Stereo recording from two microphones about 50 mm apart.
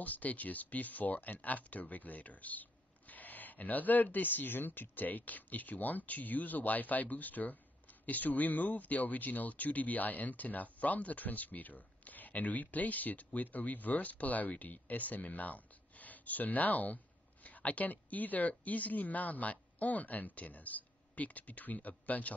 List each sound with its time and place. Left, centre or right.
0.0 s speech: left